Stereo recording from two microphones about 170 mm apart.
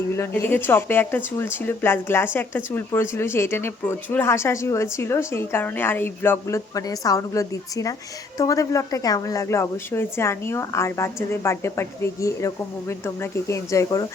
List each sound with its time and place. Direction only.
0.2 s a woman's voice: 15° left (ahead or behind)